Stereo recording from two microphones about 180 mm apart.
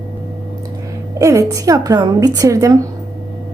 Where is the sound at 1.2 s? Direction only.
20° right (ahead or behind).